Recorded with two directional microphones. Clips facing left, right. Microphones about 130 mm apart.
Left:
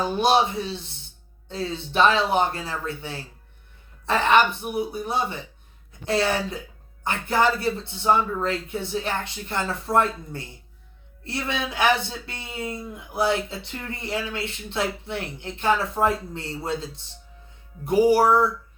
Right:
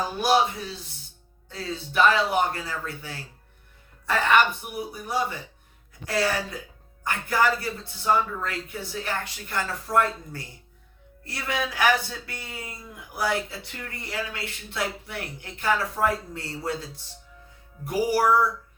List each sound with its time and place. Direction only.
0.2 s speech: 25° left (ahead or behind)